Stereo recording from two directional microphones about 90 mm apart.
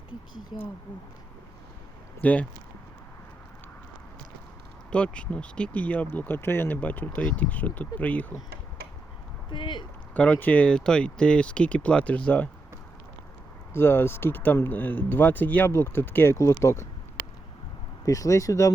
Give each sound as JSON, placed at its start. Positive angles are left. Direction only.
{"t": 0.5, "sound": "speech", "side_deg": 90}
{"t": 2.2, "sound": "speech", "side_deg": 15}
{"t": 4.9, "sound": "speech", "side_deg": 15}
{"t": 9.5, "sound": "speech", "side_deg": 60}
{"t": 10.2, "sound": "speech", "side_deg": 20}
{"t": 13.7, "sound": "speech", "side_deg": 25}
{"t": 18.0, "sound": "speech", "side_deg": 40}